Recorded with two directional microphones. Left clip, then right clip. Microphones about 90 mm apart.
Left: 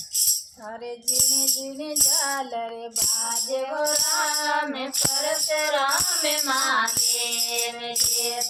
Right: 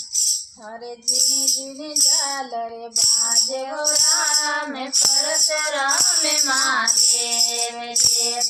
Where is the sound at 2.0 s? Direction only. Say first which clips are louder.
Right 4 dB; 5° left (ahead or behind).